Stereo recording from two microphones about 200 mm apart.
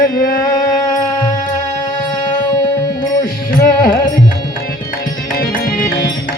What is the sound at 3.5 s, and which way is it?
Music, 45° left (ahead or behind).